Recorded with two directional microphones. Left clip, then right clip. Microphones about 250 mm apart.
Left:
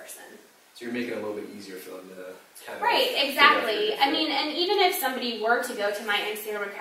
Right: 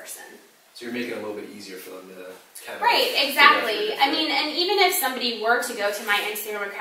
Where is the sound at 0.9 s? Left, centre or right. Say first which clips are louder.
Right 2 dB; centre.